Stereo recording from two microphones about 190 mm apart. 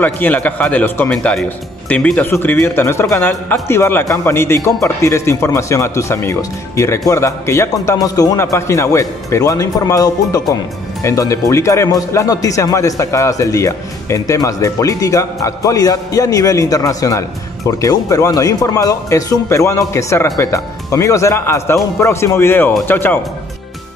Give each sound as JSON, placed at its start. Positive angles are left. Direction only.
{"t": 0.0, "sound": "speech", "side_deg": 10}